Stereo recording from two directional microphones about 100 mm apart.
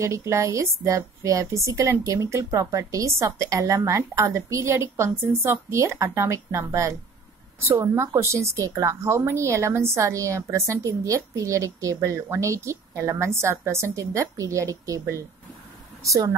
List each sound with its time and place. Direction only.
0.0 s a woman's voice: 30° right (ahead or behind)